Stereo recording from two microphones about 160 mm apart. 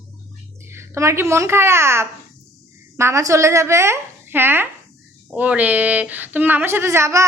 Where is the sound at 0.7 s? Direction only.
15° right (ahead or behind).